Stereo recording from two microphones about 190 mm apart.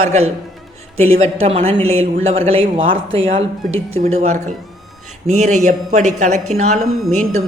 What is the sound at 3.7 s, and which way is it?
Speech, 90° right.